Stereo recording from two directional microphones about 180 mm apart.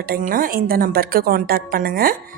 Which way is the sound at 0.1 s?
50° right (ahead or behind).